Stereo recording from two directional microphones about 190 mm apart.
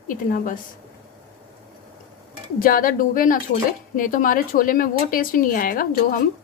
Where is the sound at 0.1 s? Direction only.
45° left (ahead or behind).